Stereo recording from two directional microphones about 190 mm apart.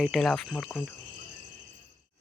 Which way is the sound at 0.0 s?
Centre (ahead or behind).